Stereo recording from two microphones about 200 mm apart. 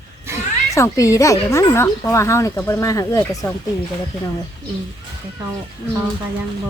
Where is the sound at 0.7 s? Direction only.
15° left (ahead or behind).